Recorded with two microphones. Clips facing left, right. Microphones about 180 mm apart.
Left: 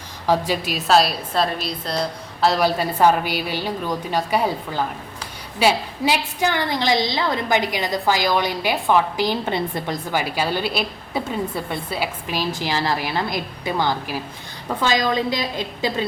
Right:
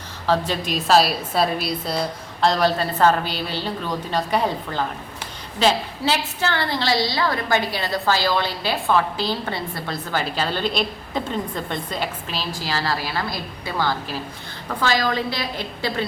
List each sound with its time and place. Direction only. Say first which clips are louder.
0.3 s a woman's voice: left 1 dB; 10° left (ahead or behind); by 2.0 s 10° right (ahead or behind)
2.4 s a woman's voice: even; 5° left (ahead or behind)